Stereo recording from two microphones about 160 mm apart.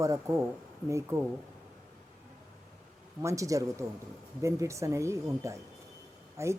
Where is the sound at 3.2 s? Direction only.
20° right (ahead or behind).